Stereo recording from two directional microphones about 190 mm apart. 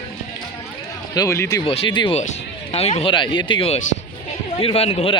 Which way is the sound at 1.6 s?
25° left (ahead or behind).